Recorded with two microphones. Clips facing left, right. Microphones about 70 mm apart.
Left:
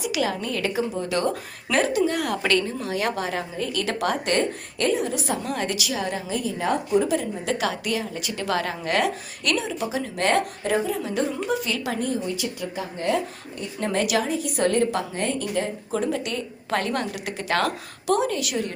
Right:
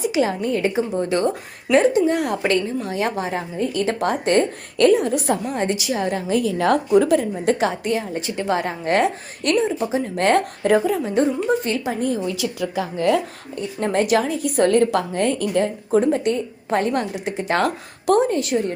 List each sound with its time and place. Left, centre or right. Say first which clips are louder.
0.0 s a woman's voice: right 5 dB; right
4.8 s a woman's voice: right 8 dB; right
5.5 s a woman's voice: right 4 dB; right
6.0 s speech: right 5 dB; right
6.2 s a woman's voice: right 10 dB; right
7.6 s speech: right 4 dB; right
11.0 s speech: right 6 dB; right
12.7 s speech: right 7 dB; right
13.7 s a woman's voice: right 5 dB; right
15.9 s speech: right 8 dB; right
16.3 s a woman's voice: right 5 dB; right